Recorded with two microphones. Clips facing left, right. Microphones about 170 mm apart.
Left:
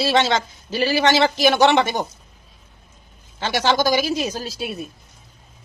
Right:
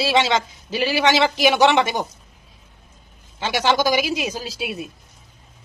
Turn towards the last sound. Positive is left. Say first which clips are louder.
# even
turn(degrees=-5)  # may be behind; listen again after turning